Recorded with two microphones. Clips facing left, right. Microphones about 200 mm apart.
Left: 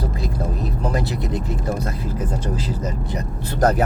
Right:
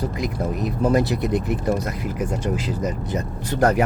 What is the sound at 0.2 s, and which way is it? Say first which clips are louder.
Vehicle: right 2 dB; 20° right (ahead or behind).